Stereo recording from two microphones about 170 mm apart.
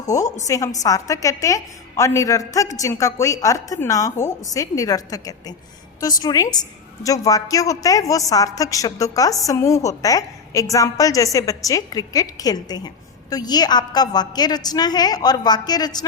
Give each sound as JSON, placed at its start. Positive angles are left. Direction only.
{"t": 0.1, "sound": "a woman's voice", "side_deg": 20}